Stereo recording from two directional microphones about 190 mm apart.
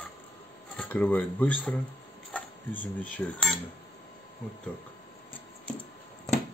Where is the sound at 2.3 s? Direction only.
10° left (ahead or behind).